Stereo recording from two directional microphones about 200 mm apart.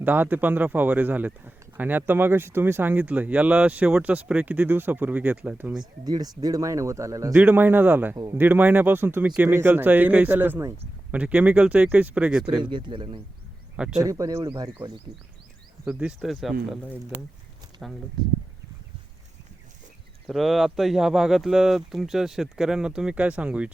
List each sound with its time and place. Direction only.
0.0 s speech: 10° right (ahead or behind)
5.8 s speech: 20° right (ahead or behind); by 12.6 s 5° right (ahead or behind)
12.6 s a man's voice: 20° right (ahead or behind)
13.7 s speech: 5° right (ahead or behind)
14.0 s speech: 15° right (ahead or behind)
15.8 s speech: 5° right (ahead or behind)
17.8 s speech: centre (ahead or behind)
20.2 s speech: centre (ahead or behind)